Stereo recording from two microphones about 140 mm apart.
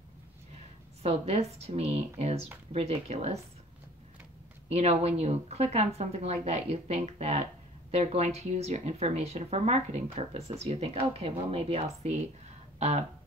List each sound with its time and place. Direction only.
1.0 s speech: 45° right (ahead or behind)
4.6 s speech: 50° right (ahead or behind)
12.7 s a sound: 50° right (ahead or behind)